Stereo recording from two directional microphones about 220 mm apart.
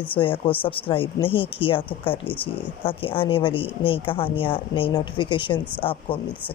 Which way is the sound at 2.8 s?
25° left (ahead or behind).